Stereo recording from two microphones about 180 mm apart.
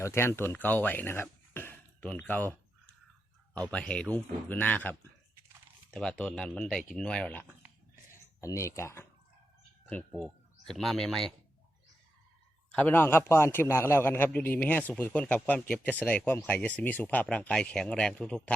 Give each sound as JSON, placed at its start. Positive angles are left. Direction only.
{"t": 0.0, "sound": "speech", "side_deg": 15}
{"t": 3.7, "sound": "a man's voice", "side_deg": 5}
{"t": 10.2, "sound": "speech", "side_deg": 0}
{"t": 12.7, "sound": "a man's voice", "side_deg": 10}